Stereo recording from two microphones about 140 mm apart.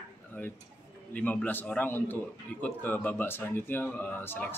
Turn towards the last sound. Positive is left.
turn(degrees=15)  # may be behind; listen again after turning